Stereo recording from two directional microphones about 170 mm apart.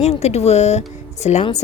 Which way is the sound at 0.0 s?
40° left (ahead or behind).